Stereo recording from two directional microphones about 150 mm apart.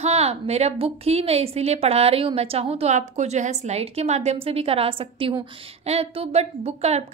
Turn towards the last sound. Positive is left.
turn(degrees=-45)  # may be behind; listen again after turning